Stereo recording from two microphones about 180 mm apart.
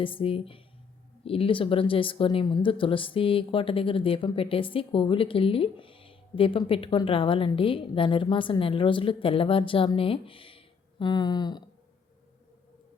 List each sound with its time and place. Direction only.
0.0 s speech: 30° left (ahead or behind)